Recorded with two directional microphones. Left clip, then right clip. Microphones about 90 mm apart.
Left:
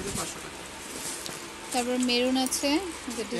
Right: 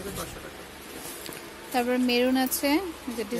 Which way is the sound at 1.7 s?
20° right (ahead or behind).